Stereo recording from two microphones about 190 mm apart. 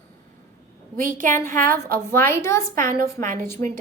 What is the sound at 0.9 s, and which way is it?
Speech, 45° right (ahead or behind).